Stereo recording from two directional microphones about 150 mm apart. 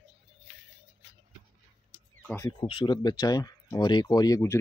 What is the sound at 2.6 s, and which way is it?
Speech, 35° left (ahead or behind).